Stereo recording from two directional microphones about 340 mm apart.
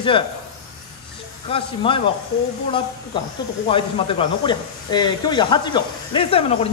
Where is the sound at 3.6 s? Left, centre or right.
Centre.